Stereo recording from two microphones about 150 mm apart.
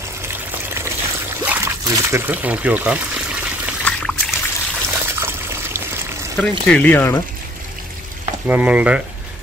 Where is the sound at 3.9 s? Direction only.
10° left (ahead or behind).